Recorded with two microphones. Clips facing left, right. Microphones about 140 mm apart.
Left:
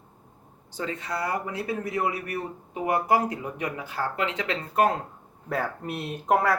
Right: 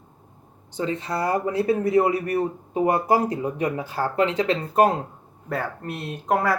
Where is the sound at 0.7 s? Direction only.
25° right (ahead or behind).